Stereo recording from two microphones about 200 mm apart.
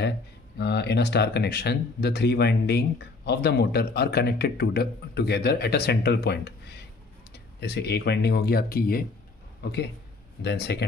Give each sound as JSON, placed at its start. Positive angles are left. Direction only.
{"t": 0.6, "sound": "speech", "side_deg": 55}